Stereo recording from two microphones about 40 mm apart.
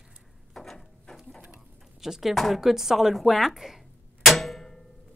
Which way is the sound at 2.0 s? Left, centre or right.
Centre.